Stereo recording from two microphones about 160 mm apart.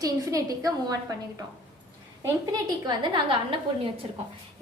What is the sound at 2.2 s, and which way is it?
A woman's voice, 25° right (ahead or behind).